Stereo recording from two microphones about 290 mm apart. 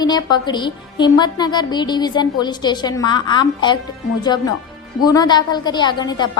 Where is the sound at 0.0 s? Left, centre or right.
Centre.